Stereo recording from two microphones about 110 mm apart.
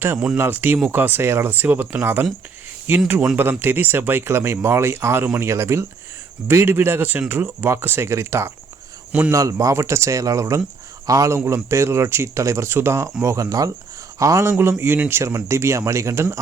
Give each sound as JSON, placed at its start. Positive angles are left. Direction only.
{"t": 0.3, "sound": "speech", "side_deg": -20}